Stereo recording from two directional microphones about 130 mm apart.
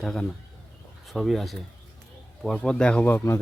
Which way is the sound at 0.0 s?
5° left (ahead or behind).